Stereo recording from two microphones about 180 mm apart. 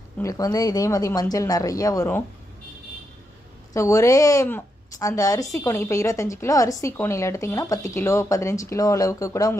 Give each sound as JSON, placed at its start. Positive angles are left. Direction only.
{"t": 0.2, "sound": "a woman's voice", "side_deg": 20}
{"t": 3.7, "sound": "a woman's voice", "side_deg": 15}